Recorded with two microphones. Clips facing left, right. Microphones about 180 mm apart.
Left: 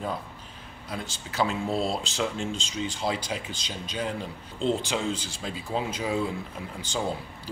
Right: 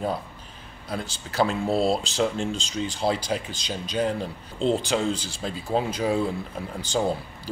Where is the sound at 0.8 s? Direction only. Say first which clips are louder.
Right 4 dB; 35° right (ahead or behind).